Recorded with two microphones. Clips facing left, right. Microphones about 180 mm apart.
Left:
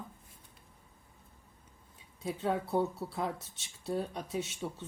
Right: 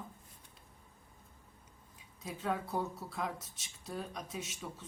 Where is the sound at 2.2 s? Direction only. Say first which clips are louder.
Left 4 dB; 25° left (ahead or behind).